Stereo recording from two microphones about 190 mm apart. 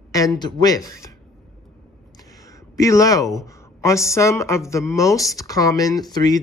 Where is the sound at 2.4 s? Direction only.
15° left (ahead or behind).